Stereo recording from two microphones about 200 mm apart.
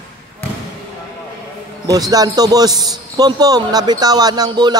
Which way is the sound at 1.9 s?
20° right (ahead or behind).